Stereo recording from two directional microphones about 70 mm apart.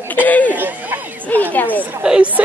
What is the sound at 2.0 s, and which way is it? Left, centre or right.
Speech, centre.